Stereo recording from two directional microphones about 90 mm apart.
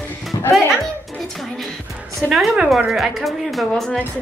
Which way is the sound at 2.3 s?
Centre (ahead or behind).